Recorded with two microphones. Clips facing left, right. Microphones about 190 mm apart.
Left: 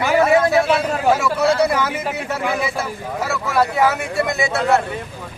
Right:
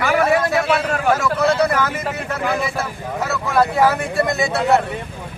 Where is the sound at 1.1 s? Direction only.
10° left (ahead or behind).